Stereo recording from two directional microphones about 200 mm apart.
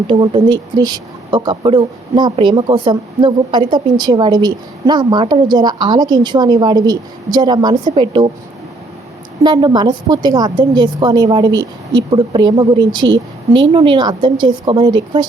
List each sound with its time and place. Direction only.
0.1 s speech: 20° right (ahead or behind)
9.4 s speech: 20° right (ahead or behind)